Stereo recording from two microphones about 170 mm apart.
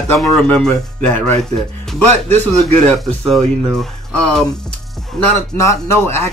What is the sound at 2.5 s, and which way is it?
Speech, centre (ahead or behind).